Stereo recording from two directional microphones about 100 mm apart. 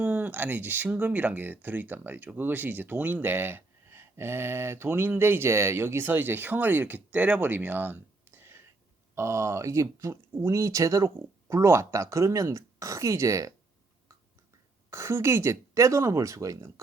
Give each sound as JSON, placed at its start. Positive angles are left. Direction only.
{"t": 0.0, "sound": "speech", "side_deg": -15}
{"t": 14.8, "sound": "speech", "side_deg": -30}